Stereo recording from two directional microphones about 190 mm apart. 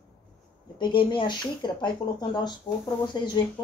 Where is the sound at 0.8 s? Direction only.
25° left (ahead or behind).